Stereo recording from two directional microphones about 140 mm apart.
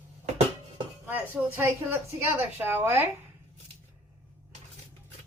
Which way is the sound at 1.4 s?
5° right (ahead or behind).